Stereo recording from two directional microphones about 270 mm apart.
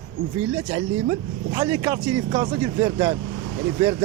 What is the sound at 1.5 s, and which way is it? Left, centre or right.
A man's voice, centre.